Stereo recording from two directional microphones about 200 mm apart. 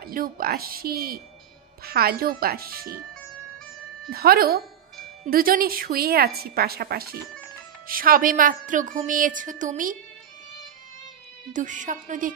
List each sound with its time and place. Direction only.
0.0 s a woman's voice: 45° right (ahead or behind)
4.1 s a woman's voice: 50° right (ahead or behind)
11.5 s a woman's voice: 40° right (ahead or behind)